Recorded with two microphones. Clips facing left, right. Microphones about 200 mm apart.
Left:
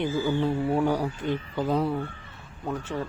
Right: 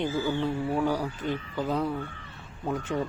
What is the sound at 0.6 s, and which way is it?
Speech, 25° left (ahead or behind).